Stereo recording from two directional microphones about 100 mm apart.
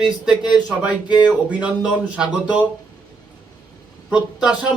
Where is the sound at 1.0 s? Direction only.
45° left (ahead or behind).